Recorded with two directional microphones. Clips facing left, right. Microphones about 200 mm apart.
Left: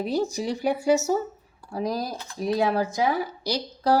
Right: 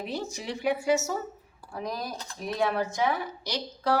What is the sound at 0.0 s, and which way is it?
A woman's voice, 35° left (ahead or behind).